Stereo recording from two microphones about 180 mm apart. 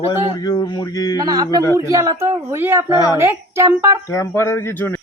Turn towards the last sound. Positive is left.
turn(degrees=10)  # may be behind; listen again after turning